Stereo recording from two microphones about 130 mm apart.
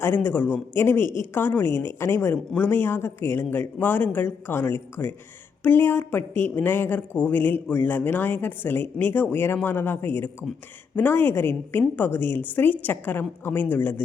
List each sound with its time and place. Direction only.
0.0 s a woman's voice: 15° left (ahead or behind)